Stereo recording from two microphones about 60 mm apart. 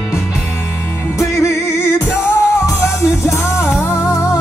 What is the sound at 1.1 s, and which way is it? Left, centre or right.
Music, left.